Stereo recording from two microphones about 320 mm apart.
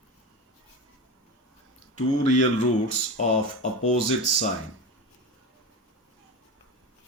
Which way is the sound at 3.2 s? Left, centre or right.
Left.